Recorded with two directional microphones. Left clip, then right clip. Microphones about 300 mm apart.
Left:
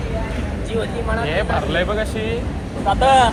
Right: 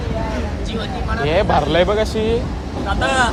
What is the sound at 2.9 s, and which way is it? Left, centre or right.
Speech, left.